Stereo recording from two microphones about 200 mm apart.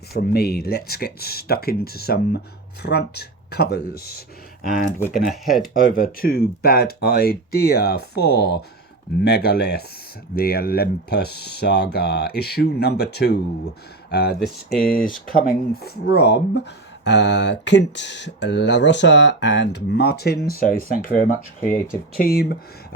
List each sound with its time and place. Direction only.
0.1 s speech: 50° left (ahead or behind)
5.3 s speech: centre (ahead or behind)
5.7 s speech: 45° left (ahead or behind)
14.4 s speech: centre (ahead or behind)
14.8 s speech: 45° left (ahead or behind)